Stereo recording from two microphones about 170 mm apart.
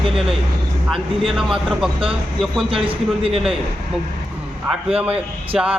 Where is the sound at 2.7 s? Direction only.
30° right (ahead or behind).